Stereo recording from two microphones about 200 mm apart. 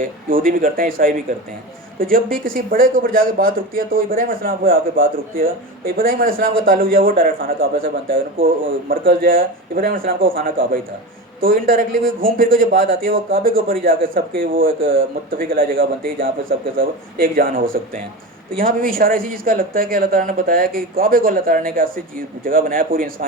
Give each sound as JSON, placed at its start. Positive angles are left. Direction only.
{"t": 0.0, "sound": "a man's voice", "side_deg": -45}